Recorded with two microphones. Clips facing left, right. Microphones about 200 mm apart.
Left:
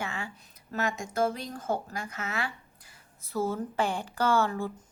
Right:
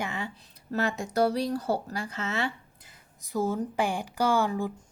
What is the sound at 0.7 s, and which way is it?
Speech, 35° right (ahead or behind).